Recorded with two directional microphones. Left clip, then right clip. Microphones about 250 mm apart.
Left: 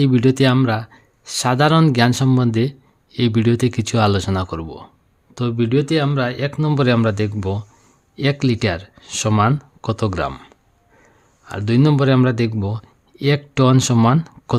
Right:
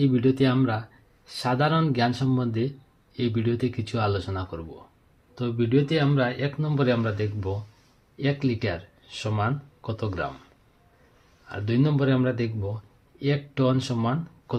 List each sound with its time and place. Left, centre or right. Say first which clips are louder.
0.0 s speech: left 7 dB; left
11.4 s speech: left 8 dB; left